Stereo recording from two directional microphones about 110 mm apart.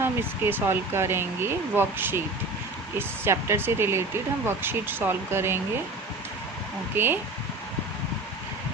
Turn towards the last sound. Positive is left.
turn(degrees=-20)  # may be behind; listen again after turning